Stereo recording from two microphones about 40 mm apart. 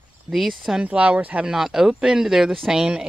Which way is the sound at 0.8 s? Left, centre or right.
Right.